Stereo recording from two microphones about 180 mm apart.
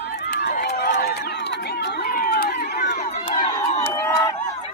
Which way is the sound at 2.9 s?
40° left (ahead or behind).